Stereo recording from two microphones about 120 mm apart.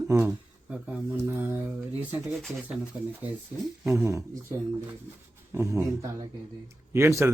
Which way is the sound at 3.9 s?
25° right (ahead or behind).